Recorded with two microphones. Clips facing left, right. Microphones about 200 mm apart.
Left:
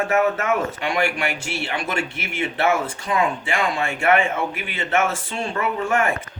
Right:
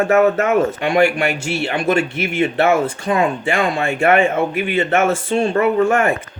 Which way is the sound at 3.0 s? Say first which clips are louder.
Right 2 dB; 40° right (ahead or behind).